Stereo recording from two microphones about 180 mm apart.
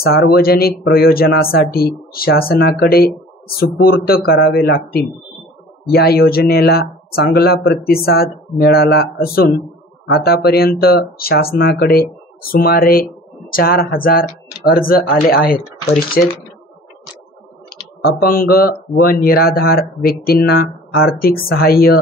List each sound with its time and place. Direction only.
0.0 s speech: 60° left (ahead or behind)
18.3 s speech: 55° left (ahead or behind)